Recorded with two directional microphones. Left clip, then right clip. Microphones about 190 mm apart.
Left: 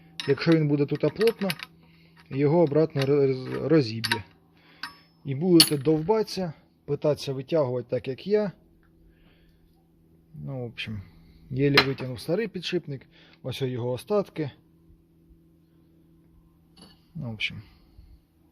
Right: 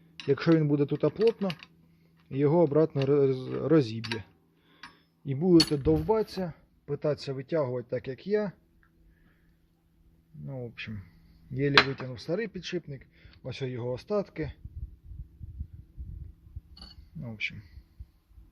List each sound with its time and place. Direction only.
0.3 s mechanisms: 5° right (ahead or behind)
0.6 s speech: 5° right (ahead or behind)
1.2 s speech: 10° left (ahead or behind)
2.3 s speech: 5° right (ahead or behind)
3.1 s mechanisms: 5° right (ahead or behind)
3.6 s speech: 5° right (ahead or behind)
5.2 s mechanisms: 10° right (ahead or behind)
5.7 s speech: centre (ahead or behind)
10.4 s speech: 10° left (ahead or behind)
17.2 s speech: 20° left (ahead or behind)